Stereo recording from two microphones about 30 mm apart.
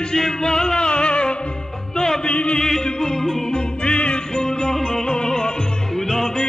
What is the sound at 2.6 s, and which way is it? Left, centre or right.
Music, left.